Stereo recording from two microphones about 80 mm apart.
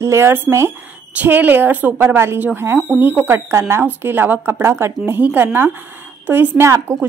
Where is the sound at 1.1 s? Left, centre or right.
Centre.